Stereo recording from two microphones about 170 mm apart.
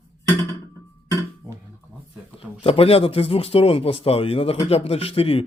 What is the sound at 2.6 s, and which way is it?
Speech, 35° left (ahead or behind).